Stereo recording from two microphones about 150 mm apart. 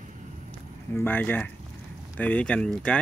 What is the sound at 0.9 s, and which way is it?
Speech, 10° left (ahead or behind).